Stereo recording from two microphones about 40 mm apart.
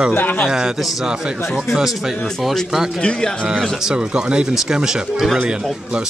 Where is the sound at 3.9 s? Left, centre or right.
Right.